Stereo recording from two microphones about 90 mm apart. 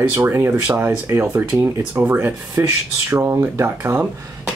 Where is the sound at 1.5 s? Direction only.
30° right (ahead or behind).